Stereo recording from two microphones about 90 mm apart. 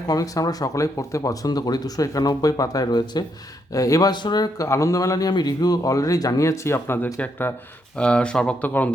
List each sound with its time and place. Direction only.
0.1 s speech: 45° left (ahead or behind)
3.7 s speech: 40° left (ahead or behind)
4.1 s speech: 55° left (ahead or behind); by 7.5 s 20° left (ahead or behind)
7.9 s speech: 10° left (ahead or behind)